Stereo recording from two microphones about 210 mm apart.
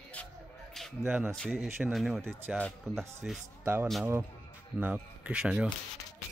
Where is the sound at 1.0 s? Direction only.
10° right (ahead or behind).